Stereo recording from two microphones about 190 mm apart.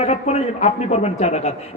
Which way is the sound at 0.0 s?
35° left (ahead or behind).